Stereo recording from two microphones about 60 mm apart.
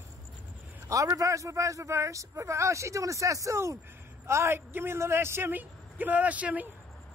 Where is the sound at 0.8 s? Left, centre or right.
Right.